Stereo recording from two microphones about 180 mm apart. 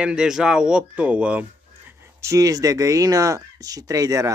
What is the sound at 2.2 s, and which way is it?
Speech, 20° right (ahead or behind).